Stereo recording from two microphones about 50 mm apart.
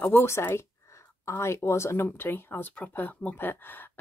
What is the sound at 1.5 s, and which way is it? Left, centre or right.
Speech, left.